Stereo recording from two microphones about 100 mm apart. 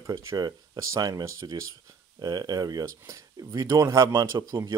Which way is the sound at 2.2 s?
45° right (ahead or behind).